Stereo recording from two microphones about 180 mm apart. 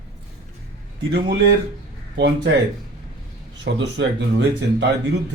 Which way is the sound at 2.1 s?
75° right (ahead or behind).